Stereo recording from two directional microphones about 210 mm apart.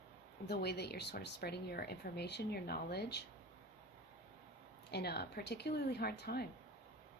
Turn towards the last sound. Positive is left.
turn(degrees=50)  # may be behind; listen again after turning